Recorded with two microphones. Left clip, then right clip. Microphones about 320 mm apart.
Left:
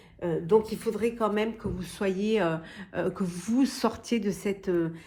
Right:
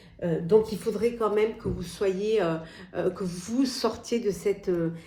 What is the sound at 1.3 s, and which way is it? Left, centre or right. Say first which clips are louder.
Speech: right 4 dB; left.